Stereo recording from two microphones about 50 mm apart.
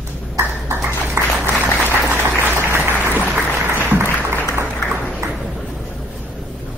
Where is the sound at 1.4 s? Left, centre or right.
Right.